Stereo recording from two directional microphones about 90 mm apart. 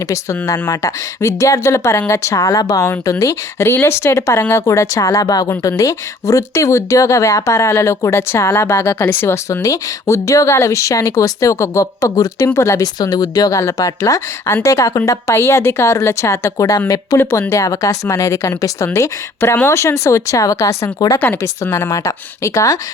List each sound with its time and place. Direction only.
0.1 s speech: 35° left (ahead or behind)
12.8 s a woman's voice: 45° left (ahead or behind)
17.1 s a woman's voice: 50° left (ahead or behind)
17.5 s speech: 35° left (ahead or behind)